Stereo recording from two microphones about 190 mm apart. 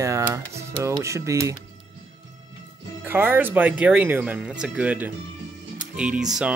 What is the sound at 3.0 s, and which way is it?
Speech, 10° right (ahead or behind).